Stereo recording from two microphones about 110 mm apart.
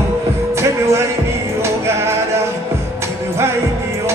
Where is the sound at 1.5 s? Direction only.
25° right (ahead or behind).